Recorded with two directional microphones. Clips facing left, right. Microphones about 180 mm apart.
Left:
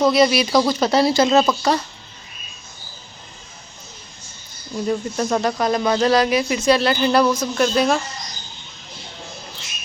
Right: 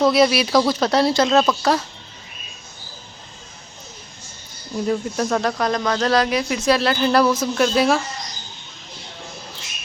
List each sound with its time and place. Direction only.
0.0 s speech: centre (ahead or behind)
4.9 s speech: centre (ahead or behind)